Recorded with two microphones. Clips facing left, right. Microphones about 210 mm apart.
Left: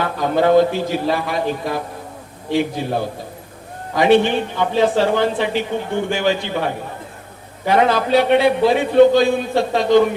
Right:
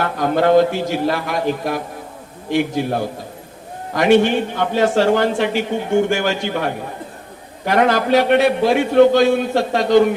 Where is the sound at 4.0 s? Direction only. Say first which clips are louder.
Right 1 dB; 45° right (ahead or behind).